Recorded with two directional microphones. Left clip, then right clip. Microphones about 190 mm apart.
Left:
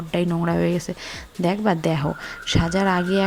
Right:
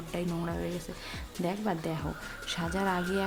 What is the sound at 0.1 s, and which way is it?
Speech, 35° left (ahead or behind).